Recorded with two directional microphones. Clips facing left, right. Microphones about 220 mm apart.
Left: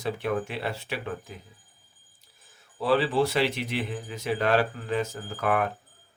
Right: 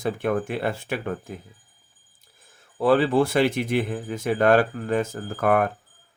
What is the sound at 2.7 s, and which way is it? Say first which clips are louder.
Speech: right 5 dB; 50° right (ahead or behind).